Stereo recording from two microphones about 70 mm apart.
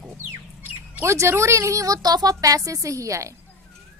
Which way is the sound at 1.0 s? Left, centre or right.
Right.